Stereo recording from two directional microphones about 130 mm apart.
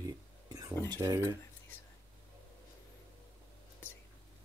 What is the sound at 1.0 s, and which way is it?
Speech, 20° right (ahead or behind).